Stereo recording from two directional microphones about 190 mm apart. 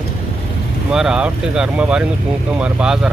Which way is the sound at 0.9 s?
5° right (ahead or behind).